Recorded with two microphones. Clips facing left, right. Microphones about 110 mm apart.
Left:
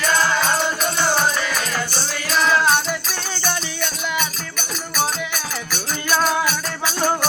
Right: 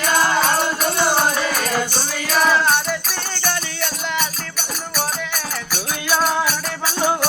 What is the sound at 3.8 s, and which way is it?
Music, centre (ahead or behind).